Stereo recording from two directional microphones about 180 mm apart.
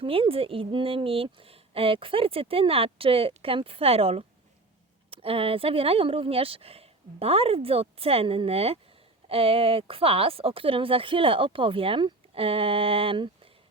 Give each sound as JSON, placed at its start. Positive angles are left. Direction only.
{"t": 0.0, "sound": "a woman's voice", "side_deg": -30}